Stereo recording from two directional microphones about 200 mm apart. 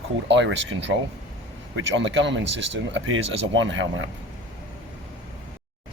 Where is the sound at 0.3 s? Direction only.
65° right (ahead or behind).